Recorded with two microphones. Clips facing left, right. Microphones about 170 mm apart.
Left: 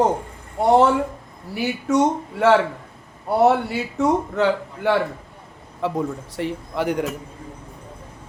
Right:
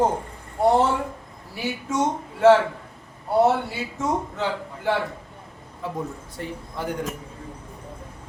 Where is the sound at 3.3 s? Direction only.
70° left (ahead or behind).